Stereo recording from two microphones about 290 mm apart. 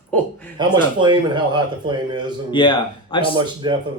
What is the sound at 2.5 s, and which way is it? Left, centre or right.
Speech, centre.